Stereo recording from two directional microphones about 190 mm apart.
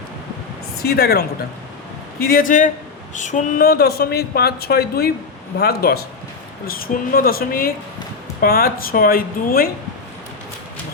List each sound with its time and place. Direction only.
0.8 s a woman's voice: 55° left (ahead or behind)